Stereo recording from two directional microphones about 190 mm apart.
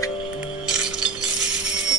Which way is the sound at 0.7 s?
5° right (ahead or behind).